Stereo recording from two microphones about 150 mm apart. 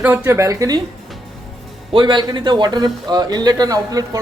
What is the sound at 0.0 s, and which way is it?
Speech, 10° right (ahead or behind).